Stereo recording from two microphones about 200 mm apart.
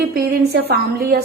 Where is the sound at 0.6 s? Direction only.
50° right (ahead or behind).